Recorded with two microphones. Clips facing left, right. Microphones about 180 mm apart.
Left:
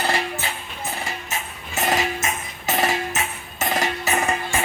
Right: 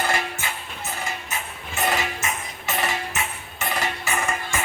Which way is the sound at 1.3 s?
40° left (ahead or behind).